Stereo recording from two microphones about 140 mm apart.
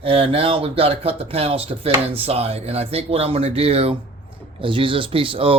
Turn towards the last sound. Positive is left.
turn(degrees=-40)  # may be behind; listen again after turning